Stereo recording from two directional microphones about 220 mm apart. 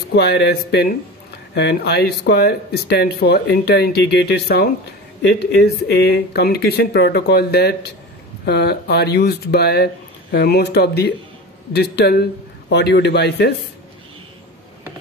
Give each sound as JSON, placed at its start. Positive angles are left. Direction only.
{"t": 0.1, "sound": "speech", "side_deg": 45}